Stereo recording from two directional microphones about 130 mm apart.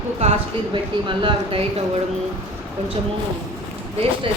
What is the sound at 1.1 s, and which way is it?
Speech, 40° right (ahead or behind).